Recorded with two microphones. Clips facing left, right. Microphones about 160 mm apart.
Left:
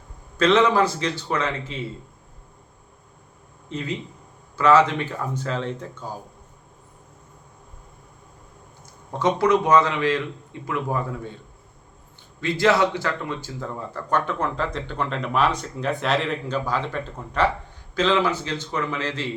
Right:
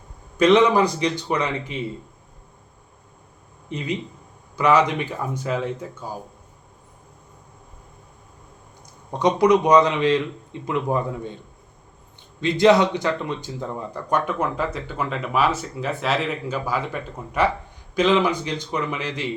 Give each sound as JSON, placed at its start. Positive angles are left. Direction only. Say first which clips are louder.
{"t": 0.3, "sound": "speech", "louder": "right 2 dB", "side_deg": -15}
{"t": 3.7, "sound": "speech", "louder": "right 2 dB", "side_deg": -15}
{"t": 9.1, "sound": "a man's voice", "louder": "right 3 dB", "side_deg": -15}
{"t": 12.4, "sound": "speech", "louder": "right 4 dB", "side_deg": -20}